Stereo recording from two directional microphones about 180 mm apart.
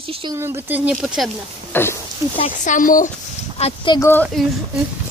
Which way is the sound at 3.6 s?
35° left (ahead or behind).